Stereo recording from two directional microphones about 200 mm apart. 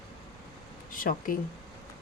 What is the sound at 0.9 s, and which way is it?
Speech, 45° left (ahead or behind).